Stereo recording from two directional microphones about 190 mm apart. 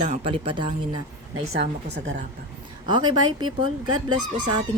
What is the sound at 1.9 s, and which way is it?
Speech, 65° right (ahead or behind).